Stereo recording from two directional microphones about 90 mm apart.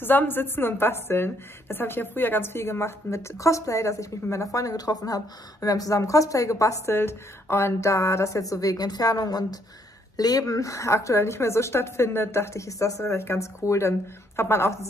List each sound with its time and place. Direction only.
0.0 s a woman's voice: 20° left (ahead or behind)